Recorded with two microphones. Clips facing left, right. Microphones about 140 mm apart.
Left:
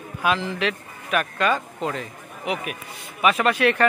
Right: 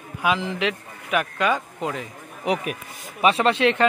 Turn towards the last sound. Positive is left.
turn(degrees=-25)  # may be behind; listen again after turning